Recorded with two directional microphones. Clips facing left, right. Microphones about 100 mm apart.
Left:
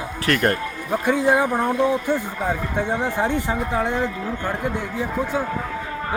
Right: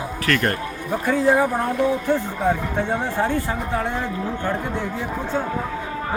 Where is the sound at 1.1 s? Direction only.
15° left (ahead or behind).